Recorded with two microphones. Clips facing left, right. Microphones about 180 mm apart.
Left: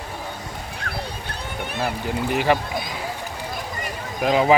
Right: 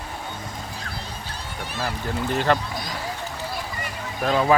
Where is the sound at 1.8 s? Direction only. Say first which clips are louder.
Left 2 dB; 15° left (ahead or behind).